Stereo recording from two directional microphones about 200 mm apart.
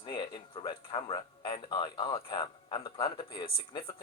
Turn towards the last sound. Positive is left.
turn(degrees=25)  # may be behind; listen again after turning